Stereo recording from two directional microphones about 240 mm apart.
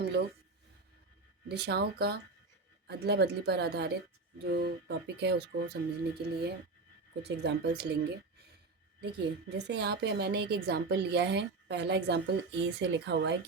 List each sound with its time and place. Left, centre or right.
1.5 s a woman's voice: right
9.0 s a woman's voice: right